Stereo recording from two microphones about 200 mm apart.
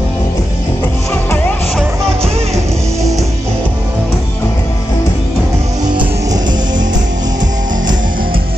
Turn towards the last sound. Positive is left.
turn(degrees=-20)  # may be behind; listen again after turning